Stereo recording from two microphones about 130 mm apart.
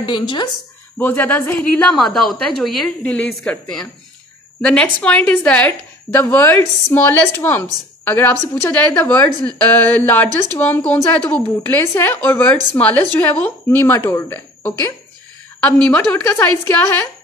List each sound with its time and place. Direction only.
0.0 s speech: 35° left (ahead or behind)
0.9 s a woman's voice: 15° left (ahead or behind)